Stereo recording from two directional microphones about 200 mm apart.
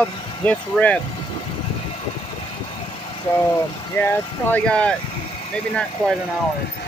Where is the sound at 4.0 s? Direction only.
10° left (ahead or behind).